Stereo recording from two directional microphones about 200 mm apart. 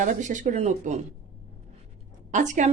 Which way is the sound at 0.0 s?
40° right (ahead or behind).